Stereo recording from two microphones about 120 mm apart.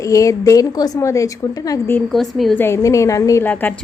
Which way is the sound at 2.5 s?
20° left (ahead or behind).